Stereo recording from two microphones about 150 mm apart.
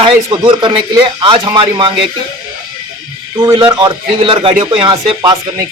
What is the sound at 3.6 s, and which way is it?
Speech, 30° right (ahead or behind).